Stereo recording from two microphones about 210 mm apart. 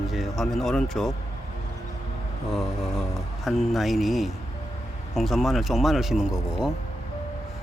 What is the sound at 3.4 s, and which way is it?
Speech, centre (ahead or behind).